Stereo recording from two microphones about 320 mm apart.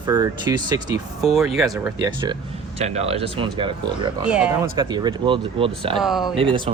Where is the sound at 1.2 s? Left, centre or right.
Centre.